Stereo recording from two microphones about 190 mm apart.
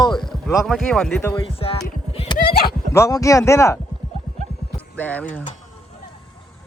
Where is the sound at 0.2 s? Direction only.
Centre (ahead or behind).